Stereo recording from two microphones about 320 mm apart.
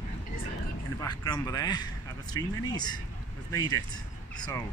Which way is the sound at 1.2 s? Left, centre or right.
Centre.